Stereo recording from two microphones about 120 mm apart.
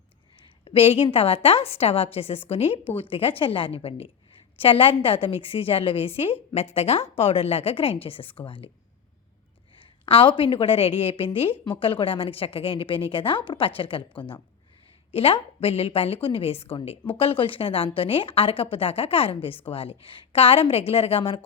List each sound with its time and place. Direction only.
0.3 s a woman's voice: 50° left (ahead or behind)
9.8 s a woman's voice: 45° left (ahead or behind)